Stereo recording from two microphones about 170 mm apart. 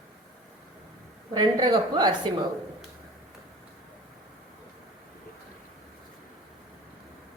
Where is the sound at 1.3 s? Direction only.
25° right (ahead or behind).